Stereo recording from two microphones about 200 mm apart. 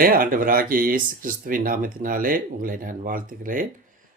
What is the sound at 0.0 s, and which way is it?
Speech, 45° right (ahead or behind).